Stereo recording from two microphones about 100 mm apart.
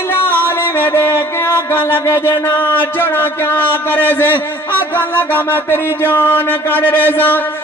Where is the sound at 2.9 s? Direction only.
20° left (ahead or behind).